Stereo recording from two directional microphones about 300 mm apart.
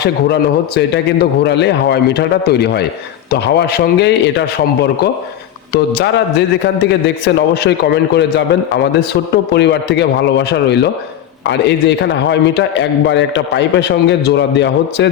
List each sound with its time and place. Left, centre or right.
0.0 s a man's voice: left